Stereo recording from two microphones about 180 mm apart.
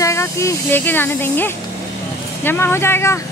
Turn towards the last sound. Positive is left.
turn(degrees=15)  # may be behind; listen again after turning